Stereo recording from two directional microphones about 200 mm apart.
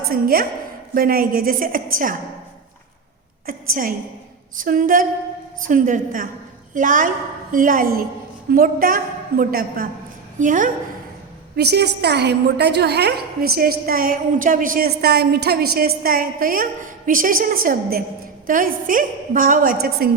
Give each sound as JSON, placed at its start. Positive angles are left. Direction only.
{"t": 0.1, "sound": "a woman's voice", "side_deg": -45}
{"t": 3.4, "sound": "a woman's voice", "side_deg": -45}
{"t": 11.5, "sound": "a woman's voice", "side_deg": -55}